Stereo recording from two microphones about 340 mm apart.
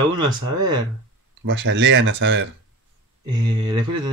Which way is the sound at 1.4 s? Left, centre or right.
Right.